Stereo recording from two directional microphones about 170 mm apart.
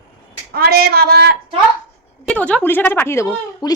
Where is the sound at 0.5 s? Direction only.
65° right (ahead or behind).